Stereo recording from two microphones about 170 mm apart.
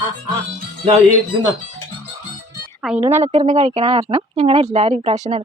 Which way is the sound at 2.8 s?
10° right (ahead or behind).